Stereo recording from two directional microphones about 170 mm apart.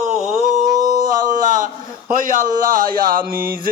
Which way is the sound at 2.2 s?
50° right (ahead or behind).